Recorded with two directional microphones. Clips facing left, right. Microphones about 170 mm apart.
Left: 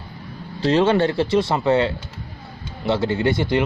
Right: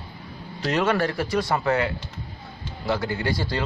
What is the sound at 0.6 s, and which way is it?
Speech, 30° left (ahead or behind).